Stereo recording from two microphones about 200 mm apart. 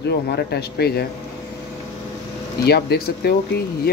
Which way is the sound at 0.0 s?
55° left (ahead or behind).